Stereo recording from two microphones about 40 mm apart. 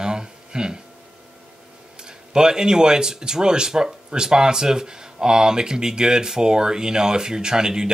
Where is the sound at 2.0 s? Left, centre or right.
Centre.